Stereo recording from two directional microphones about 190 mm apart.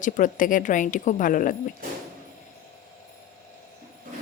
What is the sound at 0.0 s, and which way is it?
A woman's voice, 45° left (ahead or behind).